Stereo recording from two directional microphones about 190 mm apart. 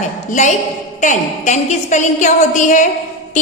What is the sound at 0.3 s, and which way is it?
A woman's voice, 40° left (ahead or behind).